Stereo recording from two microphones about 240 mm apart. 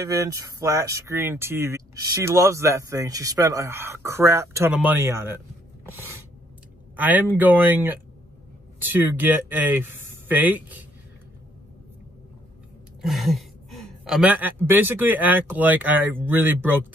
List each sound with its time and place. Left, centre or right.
0.0 s speech: centre
5.9 s a sound: centre
7.0 s speech: centre
13.0 s speech: centre